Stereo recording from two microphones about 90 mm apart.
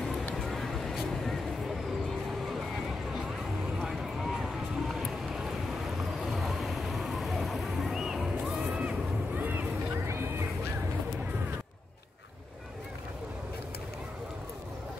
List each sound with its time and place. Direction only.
0.4 s vehicle: centre (ahead or behind)
3.8 s a sound: centre (ahead or behind)
8.6 s boat: 15° right (ahead or behind)
10.0 s music: 30° right (ahead or behind)